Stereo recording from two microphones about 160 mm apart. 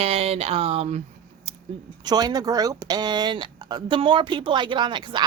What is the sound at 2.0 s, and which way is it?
Speech, 25° right (ahead or behind).